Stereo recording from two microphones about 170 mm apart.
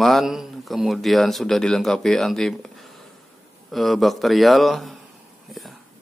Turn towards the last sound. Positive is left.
turn(degrees=0)  # may be behind; listen again after turning